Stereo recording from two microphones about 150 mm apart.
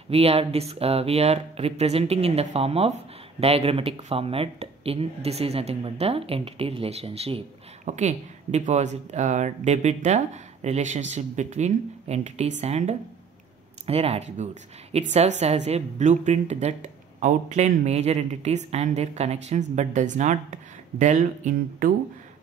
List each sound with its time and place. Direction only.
0.1 s speech: 40° right (ahead or behind)
7.8 s speech: 50° right (ahead or behind)